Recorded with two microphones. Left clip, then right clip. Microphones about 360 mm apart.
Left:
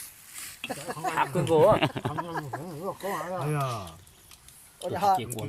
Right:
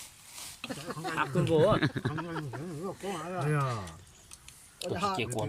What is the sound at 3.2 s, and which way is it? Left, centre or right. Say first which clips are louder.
Speech: left 2 dB; centre.